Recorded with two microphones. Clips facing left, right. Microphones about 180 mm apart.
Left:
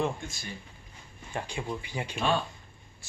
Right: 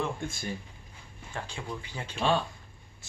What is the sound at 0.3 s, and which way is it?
Speech, 50° right (ahead or behind).